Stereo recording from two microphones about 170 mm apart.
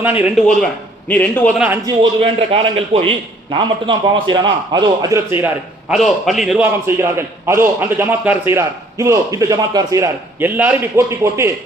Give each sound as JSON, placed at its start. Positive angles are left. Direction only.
{"t": 0.0, "sound": "a man's voice", "side_deg": -10}
{"t": 1.0, "sound": "a man's voice", "side_deg": 10}
{"t": 1.5, "sound": "a man's voice", "side_deg": -10}
{"t": 2.2, "sound": "a man's voice", "side_deg": -35}
{"t": 5.9, "sound": "a man's voice", "side_deg": 0}
{"t": 6.7, "sound": "a man's voice", "side_deg": -15}